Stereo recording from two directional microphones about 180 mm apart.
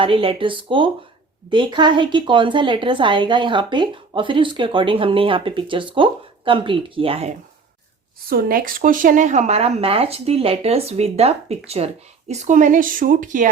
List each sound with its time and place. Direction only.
0.0 s a woman's voice: 30° right (ahead or behind)
8.3 s a woman's voice: 55° right (ahead or behind)